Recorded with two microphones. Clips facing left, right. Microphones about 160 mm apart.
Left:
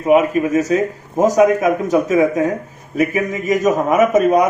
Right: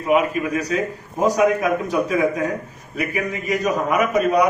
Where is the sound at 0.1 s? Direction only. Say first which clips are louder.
Left 6 dB; 45° left (ahead or behind).